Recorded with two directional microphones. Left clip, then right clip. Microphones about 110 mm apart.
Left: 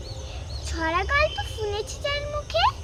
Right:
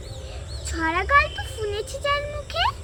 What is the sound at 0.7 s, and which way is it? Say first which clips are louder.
Speech: right 4 dB; 15° left (ahead or behind).